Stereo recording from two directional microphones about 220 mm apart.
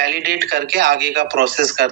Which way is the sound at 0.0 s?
45° right (ahead or behind).